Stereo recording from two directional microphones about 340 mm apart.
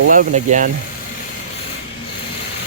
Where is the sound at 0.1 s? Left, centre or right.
Right.